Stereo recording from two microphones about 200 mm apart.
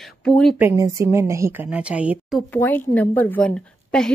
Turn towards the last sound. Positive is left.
turn(degrees=5)  # may be behind; listen again after turning